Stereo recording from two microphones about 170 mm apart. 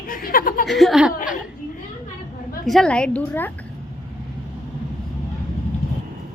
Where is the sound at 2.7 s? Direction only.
5° left (ahead or behind).